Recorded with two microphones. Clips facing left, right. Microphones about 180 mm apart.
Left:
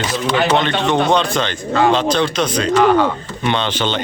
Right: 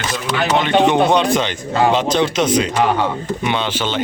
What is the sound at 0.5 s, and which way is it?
Speech, 10° right (ahead or behind).